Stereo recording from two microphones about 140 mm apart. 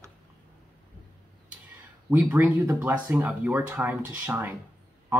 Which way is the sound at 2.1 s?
15° right (ahead or behind).